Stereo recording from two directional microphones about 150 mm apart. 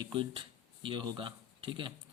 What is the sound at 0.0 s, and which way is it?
Speech, 30° right (ahead or behind).